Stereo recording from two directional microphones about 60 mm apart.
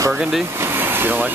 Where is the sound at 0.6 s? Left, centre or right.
Right.